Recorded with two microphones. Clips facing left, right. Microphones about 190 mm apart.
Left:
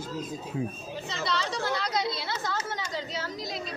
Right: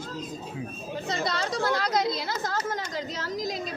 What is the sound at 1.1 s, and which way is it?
Speech, 45° right (ahead or behind).